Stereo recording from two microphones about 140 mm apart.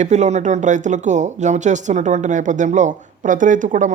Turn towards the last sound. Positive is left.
turn(degrees=-65)  # may be behind; listen again after turning